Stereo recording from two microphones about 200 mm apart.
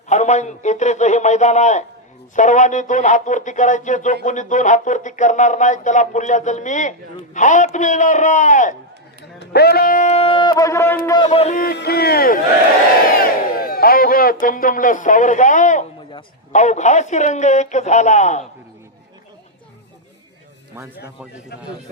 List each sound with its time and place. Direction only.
0.1 s speech: 35° left (ahead or behind)
9.5 s speech: 55° left (ahead or behind); by 11.3 s 20° left (ahead or behind)
11.3 s speech: 35° left (ahead or behind)
11.6 s a man's voice: 50° left (ahead or behind)